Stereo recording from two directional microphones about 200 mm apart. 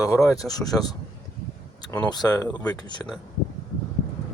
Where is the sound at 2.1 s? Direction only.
20° left (ahead or behind).